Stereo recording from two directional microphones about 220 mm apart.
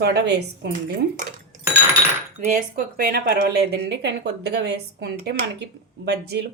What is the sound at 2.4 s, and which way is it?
A woman's voice, 35° right (ahead or behind).